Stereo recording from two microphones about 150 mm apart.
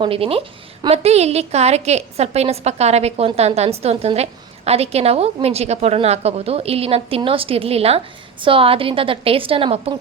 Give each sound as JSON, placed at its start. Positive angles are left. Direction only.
{"t": 0.0, "sound": "a woman's voice", "side_deg": -40}